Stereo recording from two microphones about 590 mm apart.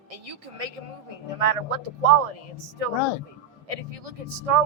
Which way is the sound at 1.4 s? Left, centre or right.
Right.